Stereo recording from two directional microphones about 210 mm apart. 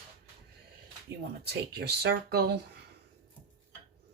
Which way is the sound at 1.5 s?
50° right (ahead or behind).